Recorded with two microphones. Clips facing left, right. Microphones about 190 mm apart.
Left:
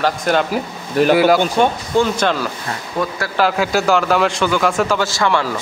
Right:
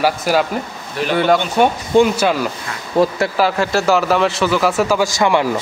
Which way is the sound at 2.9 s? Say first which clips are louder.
Right 8 dB; 30° right (ahead or behind).